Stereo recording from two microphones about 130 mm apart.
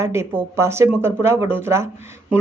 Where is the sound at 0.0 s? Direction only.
20° right (ahead or behind).